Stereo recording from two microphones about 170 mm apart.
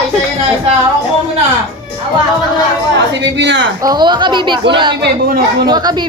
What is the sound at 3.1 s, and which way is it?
Speech, 90° right.